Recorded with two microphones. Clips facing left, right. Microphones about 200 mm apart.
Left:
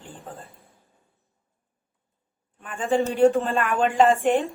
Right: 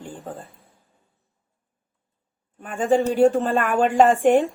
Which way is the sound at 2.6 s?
50° right (ahead or behind).